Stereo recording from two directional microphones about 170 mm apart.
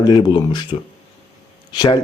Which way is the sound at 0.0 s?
25° left (ahead or behind).